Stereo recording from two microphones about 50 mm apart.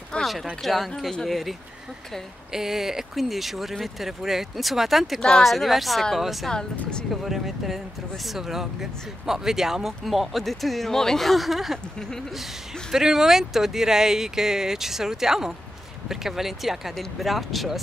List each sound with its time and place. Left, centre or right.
0.2 s a sound: centre
0.6 s speech: centre
6.5 s speech: centre
7.2 s speech: centre
12.9 s speech: centre